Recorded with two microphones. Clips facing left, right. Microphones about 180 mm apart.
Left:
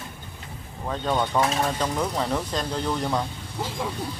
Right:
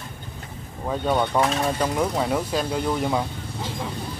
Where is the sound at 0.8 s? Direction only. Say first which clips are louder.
Right 3 dB; 10° right (ahead or behind).